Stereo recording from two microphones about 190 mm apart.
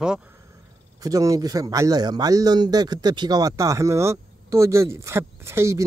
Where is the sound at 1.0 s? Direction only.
15° right (ahead or behind).